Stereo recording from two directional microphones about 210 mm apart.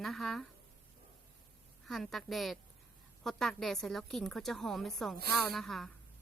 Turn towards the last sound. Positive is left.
turn(degrees=0)  # may be behind; listen again after turning